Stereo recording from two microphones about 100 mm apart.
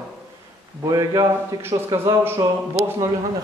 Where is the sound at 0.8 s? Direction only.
40° right (ahead or behind).